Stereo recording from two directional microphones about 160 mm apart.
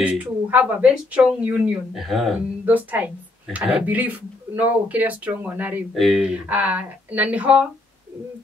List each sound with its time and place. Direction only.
0.0 s speech: 10° right (ahead or behind)